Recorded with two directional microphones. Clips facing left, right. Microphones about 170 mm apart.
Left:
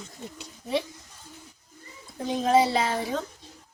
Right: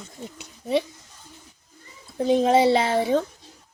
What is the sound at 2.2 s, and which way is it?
Speech, 20° right (ahead or behind).